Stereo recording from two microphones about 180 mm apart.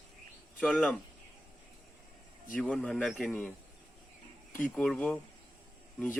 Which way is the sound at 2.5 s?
5° left (ahead or behind).